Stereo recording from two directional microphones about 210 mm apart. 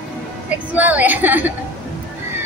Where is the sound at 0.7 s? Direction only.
5° right (ahead or behind).